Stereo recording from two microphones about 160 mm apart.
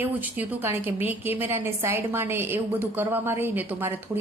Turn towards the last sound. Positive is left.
turn(degrees=-15)  # may be behind; listen again after turning